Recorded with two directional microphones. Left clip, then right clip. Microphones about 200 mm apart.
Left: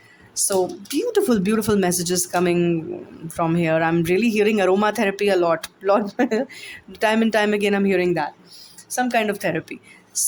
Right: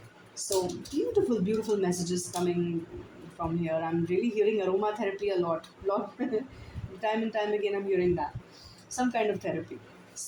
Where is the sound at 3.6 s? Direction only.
45° left (ahead or behind).